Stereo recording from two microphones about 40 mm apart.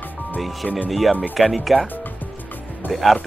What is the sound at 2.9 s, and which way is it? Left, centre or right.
Speech, centre.